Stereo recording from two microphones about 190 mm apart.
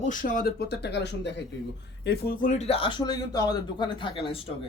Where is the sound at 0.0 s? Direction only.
45° left (ahead or behind).